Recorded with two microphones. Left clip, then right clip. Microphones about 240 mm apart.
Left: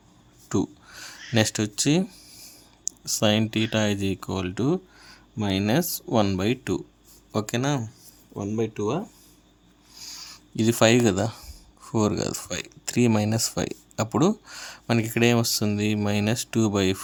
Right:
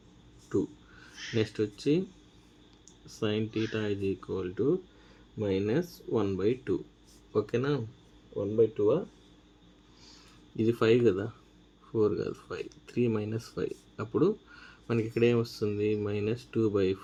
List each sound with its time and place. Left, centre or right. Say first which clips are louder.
0.4 s speech: left 4 dB; left
10.6 s speech: left 5 dB; left